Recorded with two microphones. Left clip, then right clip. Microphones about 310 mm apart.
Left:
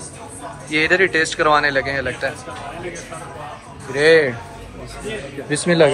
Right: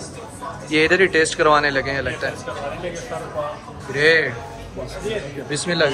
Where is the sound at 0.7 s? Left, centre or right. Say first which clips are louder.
Even; centre.